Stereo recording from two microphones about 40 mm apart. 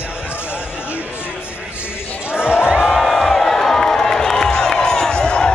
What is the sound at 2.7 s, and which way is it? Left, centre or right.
Crowd, centre.